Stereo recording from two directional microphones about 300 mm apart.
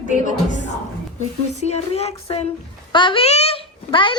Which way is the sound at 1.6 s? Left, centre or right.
Left.